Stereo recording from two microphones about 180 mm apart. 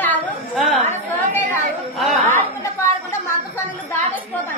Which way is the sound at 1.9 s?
Centre (ahead or behind).